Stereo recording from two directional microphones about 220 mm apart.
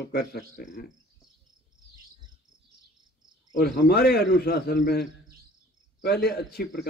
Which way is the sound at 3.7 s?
45° left (ahead or behind).